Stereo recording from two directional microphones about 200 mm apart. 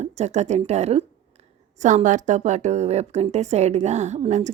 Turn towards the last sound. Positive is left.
turn(degrees=-35)  # may be behind; listen again after turning